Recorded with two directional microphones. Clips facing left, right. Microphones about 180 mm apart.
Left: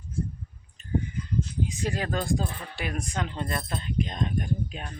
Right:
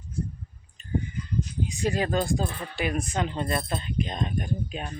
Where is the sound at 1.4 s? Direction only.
15° right (ahead or behind).